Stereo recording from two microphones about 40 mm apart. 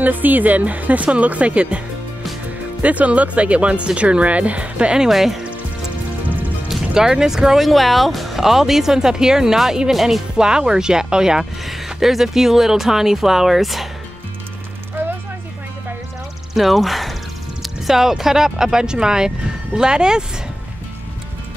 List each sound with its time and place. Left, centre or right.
0.0 s speech: right
2.8 s speech: right
5.1 s speech: centre
6.7 s speech: centre
10.3 s speech: centre
11.6 s speech: centre
15.0 s a sound: right
16.5 s speech: centre